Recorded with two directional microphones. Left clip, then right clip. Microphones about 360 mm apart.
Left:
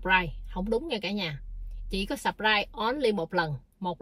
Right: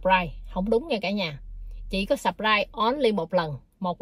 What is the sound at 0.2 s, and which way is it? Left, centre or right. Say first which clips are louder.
A woman's voice: right 3 dB; centre.